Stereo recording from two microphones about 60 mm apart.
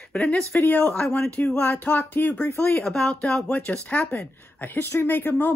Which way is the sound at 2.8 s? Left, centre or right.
Centre.